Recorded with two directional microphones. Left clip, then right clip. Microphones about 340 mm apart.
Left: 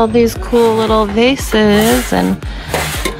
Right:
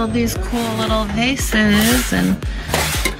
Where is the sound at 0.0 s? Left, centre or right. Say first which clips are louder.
Left 9 dB; centre.